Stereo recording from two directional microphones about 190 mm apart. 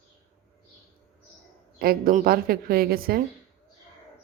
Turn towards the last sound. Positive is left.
turn(degrees=-50)  # may be behind; listen again after turning